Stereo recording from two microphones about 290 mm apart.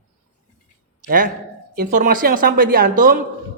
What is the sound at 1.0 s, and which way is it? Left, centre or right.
A man's voice, right.